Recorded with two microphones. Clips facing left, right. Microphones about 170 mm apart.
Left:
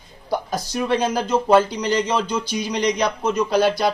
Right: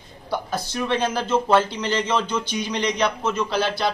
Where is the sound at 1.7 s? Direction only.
40° left (ahead or behind).